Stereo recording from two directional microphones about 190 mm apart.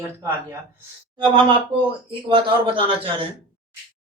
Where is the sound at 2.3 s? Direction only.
25° right (ahead or behind).